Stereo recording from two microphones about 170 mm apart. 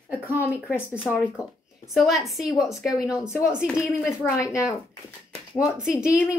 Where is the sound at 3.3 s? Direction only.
15° left (ahead or behind).